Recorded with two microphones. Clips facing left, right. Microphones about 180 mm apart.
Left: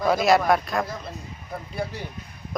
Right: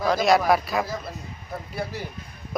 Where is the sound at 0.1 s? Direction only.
Centre (ahead or behind).